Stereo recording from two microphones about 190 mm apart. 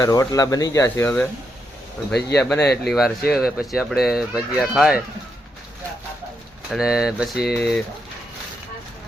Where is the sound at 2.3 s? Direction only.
5° left (ahead or behind).